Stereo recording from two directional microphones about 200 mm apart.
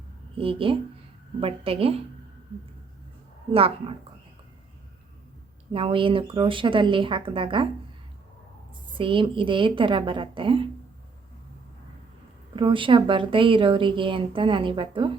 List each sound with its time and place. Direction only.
0.3 s speech: 25° right (ahead or behind)
3.5 s speech: 30° right (ahead or behind)
5.7 s speech: 25° right (ahead or behind)
9.0 s speech: 25° right (ahead or behind)
12.5 s speech: 25° right (ahead or behind)